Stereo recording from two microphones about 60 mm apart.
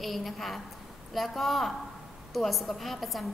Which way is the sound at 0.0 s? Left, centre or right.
Centre.